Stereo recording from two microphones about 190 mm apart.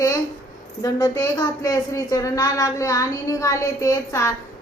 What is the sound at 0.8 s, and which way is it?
A woman's voice, 20° left (ahead or behind).